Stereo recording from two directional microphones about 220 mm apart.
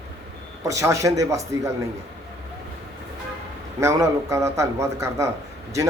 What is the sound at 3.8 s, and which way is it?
Speech, 15° right (ahead or behind).